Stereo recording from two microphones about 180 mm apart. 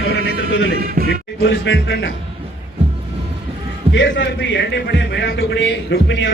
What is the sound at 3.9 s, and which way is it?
A man's voice, 90° left.